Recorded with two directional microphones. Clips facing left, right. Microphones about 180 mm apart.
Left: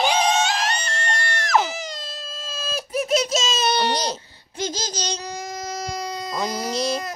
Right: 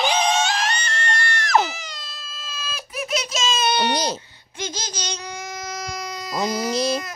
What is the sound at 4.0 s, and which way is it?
Speech, 10° right (ahead or behind).